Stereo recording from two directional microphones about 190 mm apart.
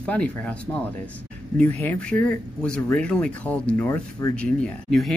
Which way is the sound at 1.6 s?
10° left (ahead or behind).